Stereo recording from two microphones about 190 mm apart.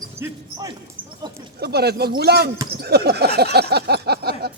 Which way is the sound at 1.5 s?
60° right (ahead or behind).